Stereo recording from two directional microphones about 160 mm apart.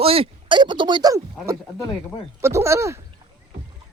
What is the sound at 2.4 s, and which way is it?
Speech, 15° right (ahead or behind).